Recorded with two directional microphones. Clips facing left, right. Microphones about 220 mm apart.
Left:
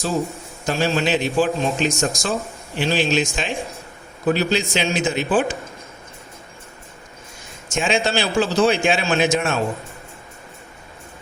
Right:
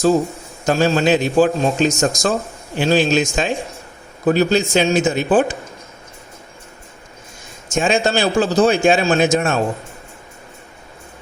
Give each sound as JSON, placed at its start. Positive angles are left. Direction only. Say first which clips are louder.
{"t": 0.6, "sound": "speech", "louder": "right 5 dB", "side_deg": -45}
{"t": 7.7, "sound": "speech", "louder": "right 4 dB", "side_deg": -40}